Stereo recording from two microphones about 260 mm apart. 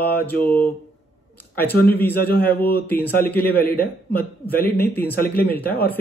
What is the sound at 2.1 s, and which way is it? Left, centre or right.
Speech, left.